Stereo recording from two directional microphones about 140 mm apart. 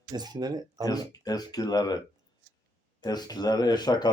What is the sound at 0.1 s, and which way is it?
Speech, 30° right (ahead or behind).